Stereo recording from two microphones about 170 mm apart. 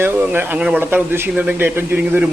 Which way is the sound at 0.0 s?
10° right (ahead or behind).